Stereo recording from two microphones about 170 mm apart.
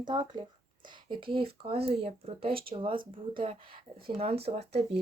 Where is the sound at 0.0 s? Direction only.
25° right (ahead or behind).